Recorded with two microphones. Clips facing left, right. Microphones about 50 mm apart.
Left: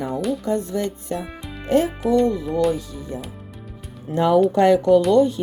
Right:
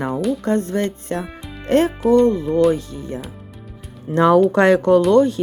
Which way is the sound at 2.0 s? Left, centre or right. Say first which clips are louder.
Right 7 dB; centre.